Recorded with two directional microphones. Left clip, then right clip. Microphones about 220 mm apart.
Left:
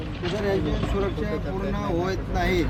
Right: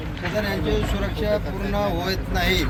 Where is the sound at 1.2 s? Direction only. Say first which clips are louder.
Right 5 dB; 25° right (ahead or behind).